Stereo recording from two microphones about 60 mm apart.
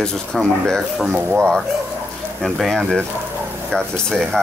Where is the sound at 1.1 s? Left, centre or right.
Right.